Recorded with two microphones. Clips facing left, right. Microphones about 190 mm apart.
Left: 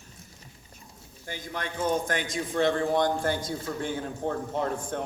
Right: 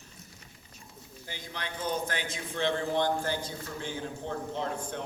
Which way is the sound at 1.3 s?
50° left (ahead or behind).